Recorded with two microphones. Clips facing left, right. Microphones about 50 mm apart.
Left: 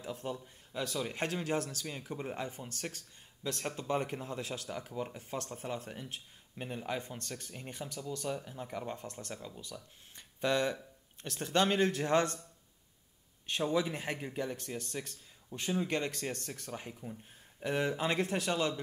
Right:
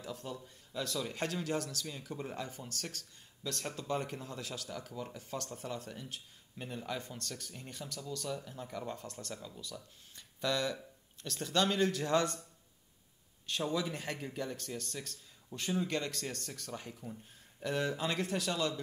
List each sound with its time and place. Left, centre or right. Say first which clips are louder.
0.0 s a man's voice: left 3 dB; left
10.1 s a sound: left 3 dB; left
11.2 s a man's voice: left 2 dB; left
13.5 s a man's voice: left 3 dB; left